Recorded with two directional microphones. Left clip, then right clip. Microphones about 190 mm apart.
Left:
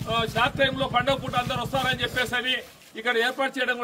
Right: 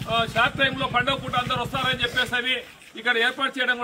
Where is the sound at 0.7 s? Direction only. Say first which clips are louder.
Even; 20° left (ahead or behind).